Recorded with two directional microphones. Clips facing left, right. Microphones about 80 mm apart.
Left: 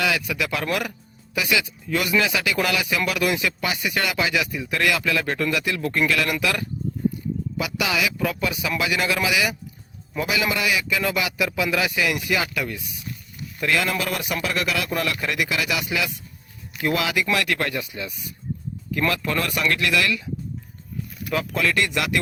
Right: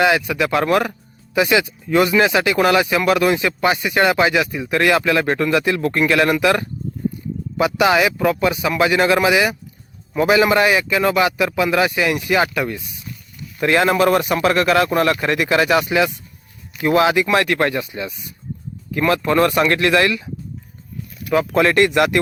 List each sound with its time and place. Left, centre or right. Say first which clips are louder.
0.0 s speech: right 8 dB; right
21.5 s speech: right 9 dB; right